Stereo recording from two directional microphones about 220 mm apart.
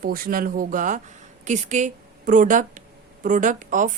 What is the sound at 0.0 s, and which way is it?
A woman's voice, 40° right (ahead or behind).